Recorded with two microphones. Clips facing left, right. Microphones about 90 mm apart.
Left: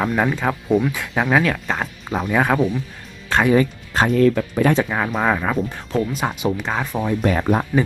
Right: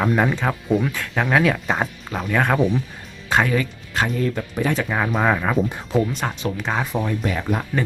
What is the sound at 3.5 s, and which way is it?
Speech, 35° left (ahead or behind).